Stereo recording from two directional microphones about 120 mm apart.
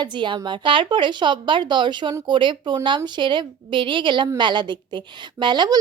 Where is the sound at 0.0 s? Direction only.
40° right (ahead or behind).